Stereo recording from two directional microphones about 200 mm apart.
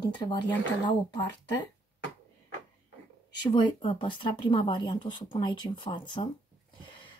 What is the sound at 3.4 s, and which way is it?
Speech, 20° left (ahead or behind).